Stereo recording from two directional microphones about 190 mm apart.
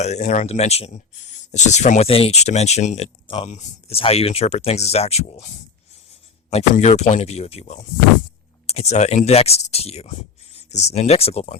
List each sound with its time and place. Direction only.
0.2 s speech: 35° left (ahead or behind)
6.5 s speech: 35° left (ahead or behind)